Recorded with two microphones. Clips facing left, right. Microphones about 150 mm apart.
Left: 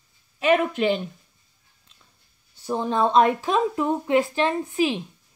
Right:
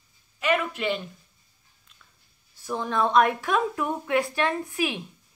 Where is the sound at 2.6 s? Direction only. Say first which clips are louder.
Left 3 dB; 25° left (ahead or behind).